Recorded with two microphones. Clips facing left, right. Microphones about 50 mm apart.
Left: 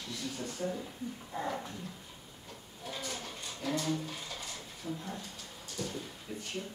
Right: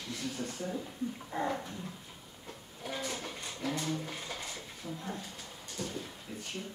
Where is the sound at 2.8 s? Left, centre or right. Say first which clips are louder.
Right 3 dB; centre.